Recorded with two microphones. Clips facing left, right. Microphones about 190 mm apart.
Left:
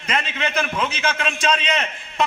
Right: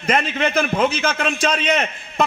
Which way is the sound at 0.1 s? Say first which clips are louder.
Right 5 dB; 50° right (ahead or behind).